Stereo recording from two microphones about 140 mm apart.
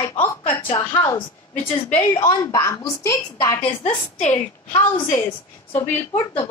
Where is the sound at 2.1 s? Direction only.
30° left (ahead or behind).